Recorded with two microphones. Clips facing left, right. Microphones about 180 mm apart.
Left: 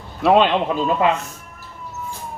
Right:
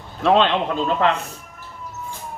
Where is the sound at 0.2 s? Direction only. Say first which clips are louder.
Left 2 dB; 10° left (ahead or behind).